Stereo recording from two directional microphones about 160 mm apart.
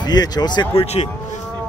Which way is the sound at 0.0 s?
25° left (ahead or behind).